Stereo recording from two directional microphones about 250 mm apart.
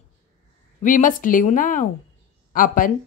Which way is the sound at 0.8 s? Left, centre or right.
Left.